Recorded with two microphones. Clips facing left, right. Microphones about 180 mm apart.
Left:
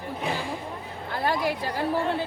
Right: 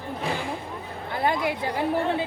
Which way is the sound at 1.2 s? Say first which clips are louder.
Right 1 dB; 20° right (ahead or behind).